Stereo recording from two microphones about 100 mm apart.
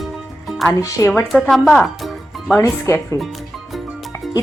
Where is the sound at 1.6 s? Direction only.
Centre (ahead or behind).